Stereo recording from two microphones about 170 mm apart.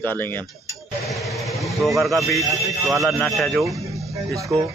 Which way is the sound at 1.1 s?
Centre (ahead or behind).